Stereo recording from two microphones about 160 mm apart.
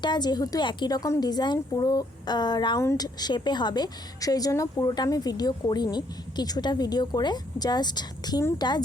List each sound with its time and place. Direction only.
0.0 s speech: 25° left (ahead or behind)